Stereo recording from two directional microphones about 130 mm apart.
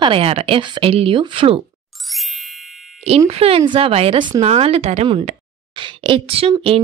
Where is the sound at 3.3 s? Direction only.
50° right (ahead or behind).